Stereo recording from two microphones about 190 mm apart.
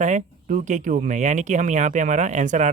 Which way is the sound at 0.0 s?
40° right (ahead or behind).